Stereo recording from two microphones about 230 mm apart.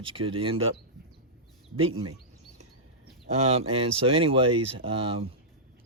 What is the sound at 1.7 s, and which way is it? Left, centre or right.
Speech, right.